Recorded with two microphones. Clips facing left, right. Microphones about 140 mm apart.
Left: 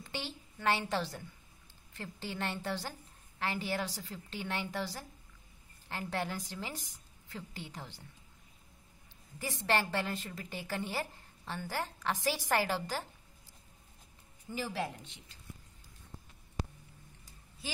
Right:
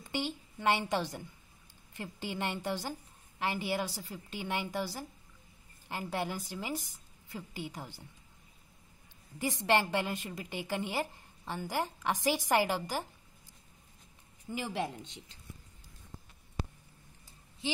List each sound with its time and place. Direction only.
0.0 s a woman's voice: 15° right (ahead or behind)
9.4 s a woman's voice: 15° right (ahead or behind)
14.5 s speech: 20° right (ahead or behind)